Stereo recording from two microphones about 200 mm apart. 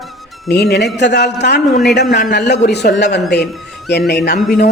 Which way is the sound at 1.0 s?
55° left (ahead or behind).